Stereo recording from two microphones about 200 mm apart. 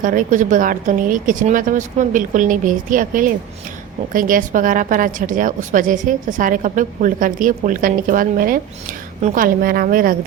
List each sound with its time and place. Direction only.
0.0 s a woman's voice: 40° right (ahead or behind)